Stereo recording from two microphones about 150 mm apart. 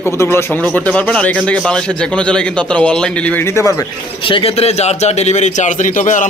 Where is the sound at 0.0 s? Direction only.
15° left (ahead or behind).